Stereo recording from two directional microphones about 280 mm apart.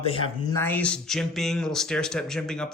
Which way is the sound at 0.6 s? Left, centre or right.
Centre.